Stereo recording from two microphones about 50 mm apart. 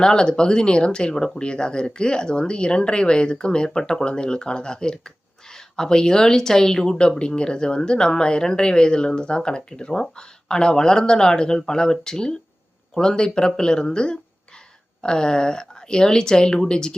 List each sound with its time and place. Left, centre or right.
0.0 s speech: centre